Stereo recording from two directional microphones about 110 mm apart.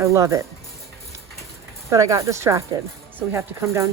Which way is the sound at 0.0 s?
30° right (ahead or behind).